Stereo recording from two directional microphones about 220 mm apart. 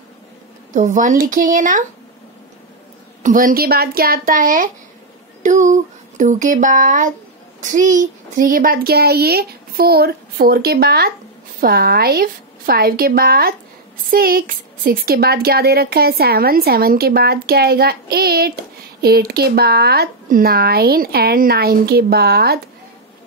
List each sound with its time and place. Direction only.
0.7 s speech: 35° right (ahead or behind)
3.2 s speech: 35° right (ahead or behind)